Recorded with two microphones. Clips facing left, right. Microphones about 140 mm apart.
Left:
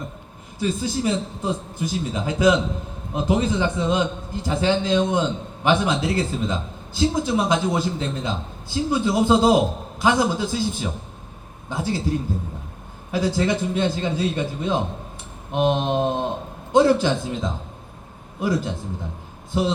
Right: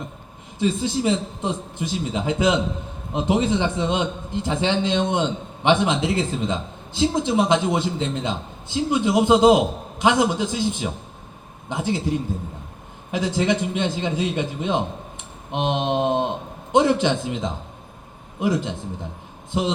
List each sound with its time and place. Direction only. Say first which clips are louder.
0.6 s a man's voice: right 2 dB; 25° right (ahead or behind)